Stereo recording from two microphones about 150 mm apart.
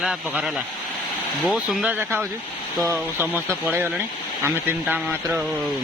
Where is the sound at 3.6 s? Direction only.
15° right (ahead or behind).